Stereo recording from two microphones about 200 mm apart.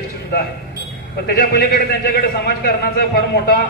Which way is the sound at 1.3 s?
50° left (ahead or behind).